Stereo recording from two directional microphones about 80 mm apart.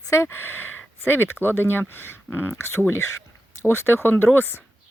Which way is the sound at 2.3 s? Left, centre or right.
Centre.